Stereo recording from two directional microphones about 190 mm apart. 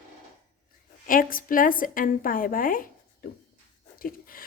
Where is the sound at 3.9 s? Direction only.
50° left (ahead or behind).